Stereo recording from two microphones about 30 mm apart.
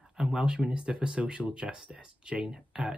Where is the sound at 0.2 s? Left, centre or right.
Centre.